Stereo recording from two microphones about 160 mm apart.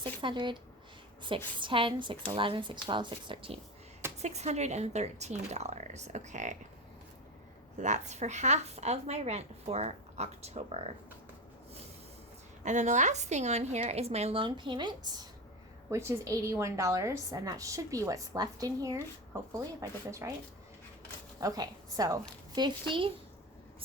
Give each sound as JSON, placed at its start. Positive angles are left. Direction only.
{"t": 0.0, "sound": "a woman's voice", "side_deg": -30}
{"t": 4.2, "sound": "a woman's voice", "side_deg": -45}
{"t": 7.8, "sound": "a woman's voice", "side_deg": -50}
{"t": 12.6, "sound": "a woman's voice", "side_deg": -50}
{"t": 21.4, "sound": "a woman's voice", "side_deg": -25}